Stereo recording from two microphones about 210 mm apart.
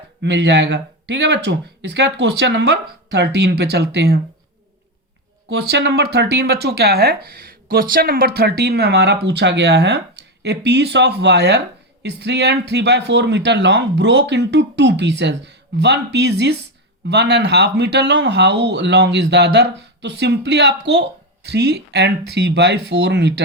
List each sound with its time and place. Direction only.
0.2 s speech: 55° right (ahead or behind)
5.5 s speech: 50° right (ahead or behind)